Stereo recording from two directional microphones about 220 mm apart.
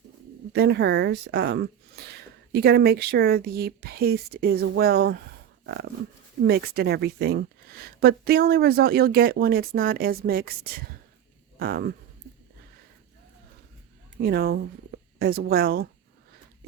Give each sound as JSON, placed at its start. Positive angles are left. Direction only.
{"t": 0.5, "sound": "speech", "side_deg": -50}
{"t": 6.4, "sound": "speech", "side_deg": -45}
{"t": 14.2, "sound": "speech", "side_deg": -45}